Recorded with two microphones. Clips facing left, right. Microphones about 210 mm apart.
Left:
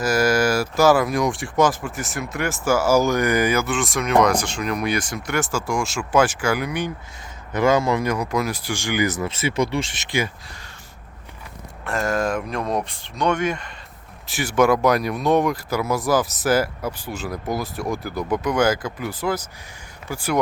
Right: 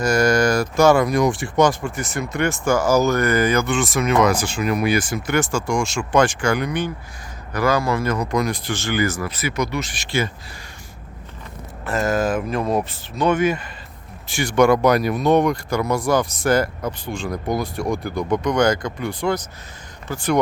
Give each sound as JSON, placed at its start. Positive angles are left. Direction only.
{"t": 0.0, "sound": "speech", "side_deg": 5}
{"t": 7.5, "sound": "speech", "side_deg": 20}
{"t": 11.9, "sound": "speech", "side_deg": 0}